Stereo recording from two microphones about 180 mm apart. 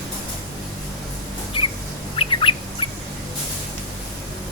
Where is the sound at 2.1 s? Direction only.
30° left (ahead or behind).